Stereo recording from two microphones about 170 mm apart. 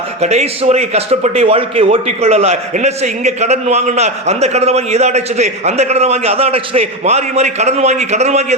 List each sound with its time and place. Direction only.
0.2 s speech: 40° right (ahead or behind)